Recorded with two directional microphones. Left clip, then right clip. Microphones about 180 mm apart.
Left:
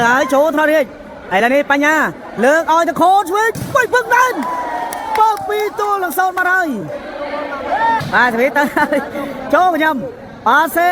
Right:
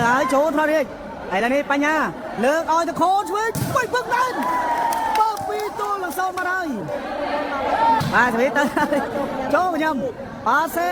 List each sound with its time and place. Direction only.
0.0 s a man's voice: 20° left (ahead or behind)
8.1 s a woman's voice: 15° left (ahead or behind)